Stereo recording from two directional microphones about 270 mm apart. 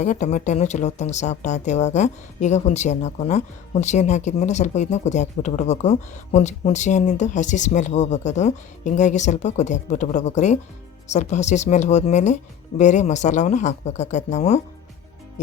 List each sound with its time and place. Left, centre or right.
0.0 s speech: left